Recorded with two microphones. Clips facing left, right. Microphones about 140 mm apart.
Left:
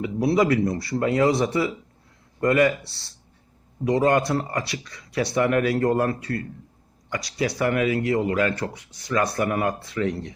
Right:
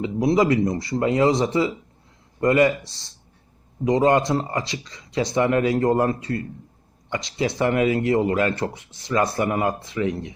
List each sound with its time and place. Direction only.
0.0 s speech: 20° right (ahead or behind)